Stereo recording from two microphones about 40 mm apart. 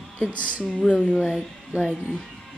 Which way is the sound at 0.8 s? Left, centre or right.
Left.